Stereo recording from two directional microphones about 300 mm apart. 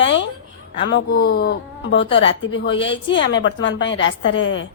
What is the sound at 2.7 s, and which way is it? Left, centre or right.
Speech, centre.